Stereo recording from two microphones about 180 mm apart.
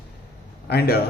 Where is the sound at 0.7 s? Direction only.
60° left (ahead or behind).